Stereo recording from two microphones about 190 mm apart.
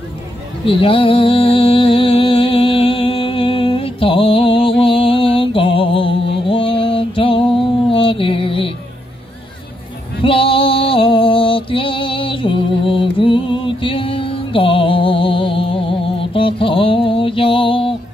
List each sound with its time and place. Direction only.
0.7 s music: 30° left (ahead or behind)
10.2 s music: 30° left (ahead or behind)